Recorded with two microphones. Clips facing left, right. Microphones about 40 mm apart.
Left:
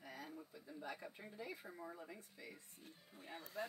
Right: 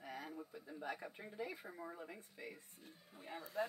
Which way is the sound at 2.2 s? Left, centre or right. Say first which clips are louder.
Right 4 dB; right.